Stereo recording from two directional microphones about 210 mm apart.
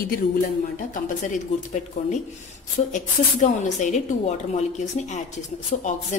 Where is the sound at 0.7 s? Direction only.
40° left (ahead or behind).